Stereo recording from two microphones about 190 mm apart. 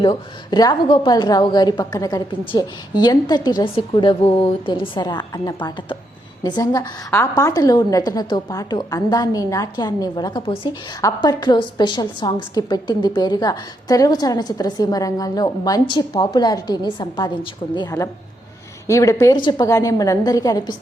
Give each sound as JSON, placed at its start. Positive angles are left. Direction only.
{"t": 0.0, "sound": "a woman's voice", "side_deg": 25}